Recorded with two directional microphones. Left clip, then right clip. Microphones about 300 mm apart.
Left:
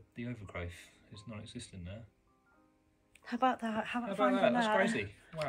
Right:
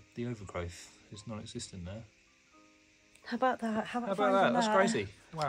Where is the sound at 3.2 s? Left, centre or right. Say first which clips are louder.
Right 1 dB; right.